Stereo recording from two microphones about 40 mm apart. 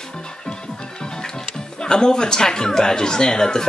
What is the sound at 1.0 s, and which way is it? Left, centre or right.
Speech, centre.